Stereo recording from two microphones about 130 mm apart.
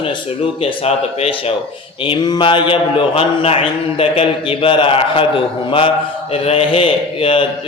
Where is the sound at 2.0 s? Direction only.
35° left (ahead or behind).